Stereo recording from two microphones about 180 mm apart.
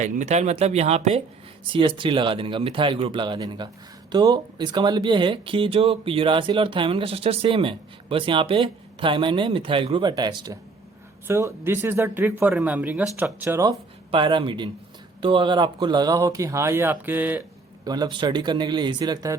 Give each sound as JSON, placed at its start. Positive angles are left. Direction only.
{"t": 0.0, "sound": "speech", "side_deg": -40}
{"t": 14.1, "sound": "speech", "side_deg": -25}
{"t": 17.8, "sound": "speech", "side_deg": -20}